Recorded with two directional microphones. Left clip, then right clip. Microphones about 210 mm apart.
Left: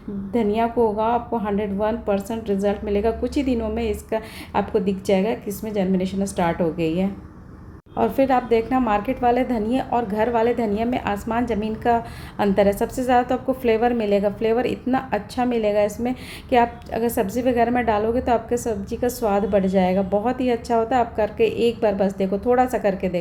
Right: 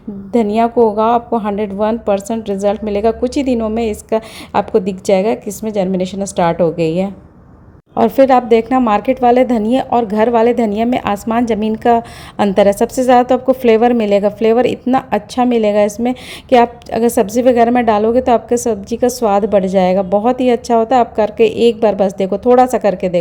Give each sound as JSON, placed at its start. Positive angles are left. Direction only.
{"t": 0.3, "sound": "a woman's voice", "side_deg": -40}